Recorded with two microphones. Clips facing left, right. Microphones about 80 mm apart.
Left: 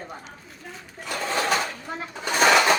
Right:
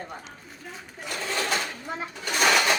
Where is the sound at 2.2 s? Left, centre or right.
Left.